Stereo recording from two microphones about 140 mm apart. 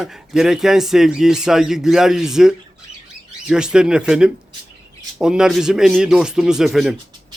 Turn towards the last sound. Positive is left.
turn(degrees=0)  # may be behind; listen again after turning